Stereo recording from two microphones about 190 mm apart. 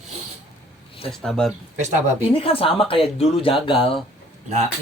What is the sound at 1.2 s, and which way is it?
Speech, centre (ahead or behind).